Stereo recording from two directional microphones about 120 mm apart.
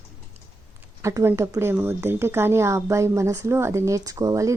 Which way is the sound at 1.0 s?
25° right (ahead or behind).